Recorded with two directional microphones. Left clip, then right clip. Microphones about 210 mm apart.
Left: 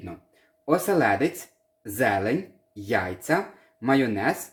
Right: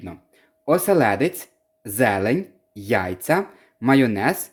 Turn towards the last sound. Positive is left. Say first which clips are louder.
# right 4 dB
turn(degrees=-55)  # may be behind; listen again after turning